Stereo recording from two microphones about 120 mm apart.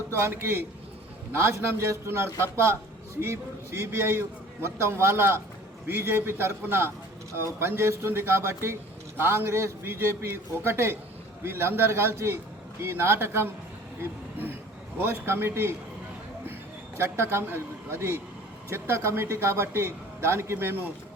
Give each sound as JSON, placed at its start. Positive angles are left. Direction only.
{"t": 0.1, "sound": "a man's voice", "side_deg": -20}
{"t": 15.0, "sound": "a man's voice", "side_deg": -20}
{"t": 17.0, "sound": "a man's voice", "side_deg": -20}